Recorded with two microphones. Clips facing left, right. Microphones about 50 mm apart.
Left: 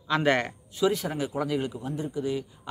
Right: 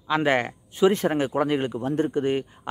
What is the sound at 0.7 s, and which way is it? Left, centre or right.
Speech, right.